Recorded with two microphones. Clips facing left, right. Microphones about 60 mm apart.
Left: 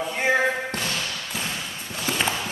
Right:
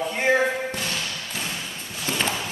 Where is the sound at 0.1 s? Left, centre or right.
Centre.